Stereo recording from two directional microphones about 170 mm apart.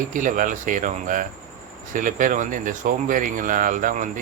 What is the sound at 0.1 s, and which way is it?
Speech, 50° right (ahead or behind).